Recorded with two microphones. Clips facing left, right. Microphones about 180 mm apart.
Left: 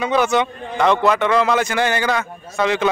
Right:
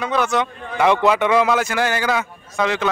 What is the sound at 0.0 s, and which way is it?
Speech, centre (ahead or behind).